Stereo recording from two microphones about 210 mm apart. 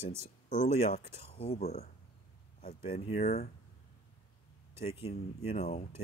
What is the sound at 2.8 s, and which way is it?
Speech, 30° left (ahead or behind).